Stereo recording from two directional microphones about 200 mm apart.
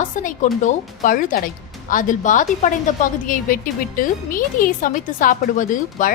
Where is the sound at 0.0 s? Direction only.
40° left (ahead or behind).